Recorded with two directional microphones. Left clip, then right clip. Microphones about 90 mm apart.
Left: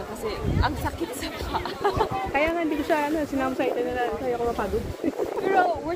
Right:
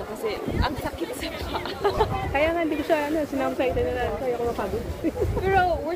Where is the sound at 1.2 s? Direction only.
85° left.